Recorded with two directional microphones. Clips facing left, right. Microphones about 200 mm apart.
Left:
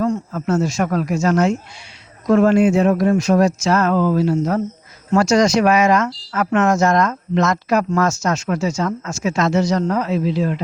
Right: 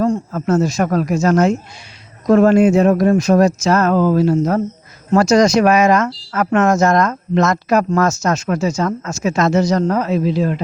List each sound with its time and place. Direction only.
0.0 s speech: 35° right (ahead or behind)